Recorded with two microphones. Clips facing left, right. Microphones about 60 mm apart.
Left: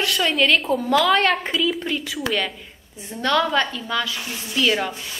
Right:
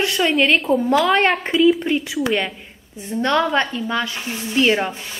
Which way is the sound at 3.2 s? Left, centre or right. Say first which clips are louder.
Right 2 dB; right.